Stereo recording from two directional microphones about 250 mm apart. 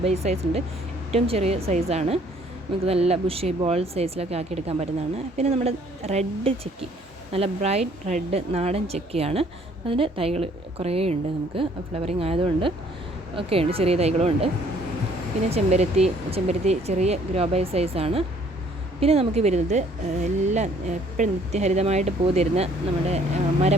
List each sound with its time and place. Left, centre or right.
0.0 s a woman's voice: right